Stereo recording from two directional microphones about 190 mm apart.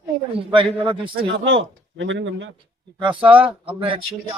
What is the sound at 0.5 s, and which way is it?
Speech, 25° right (ahead or behind).